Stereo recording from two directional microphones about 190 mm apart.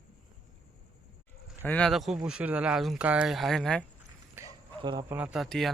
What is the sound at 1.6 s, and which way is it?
Speech, 5° left (ahead or behind).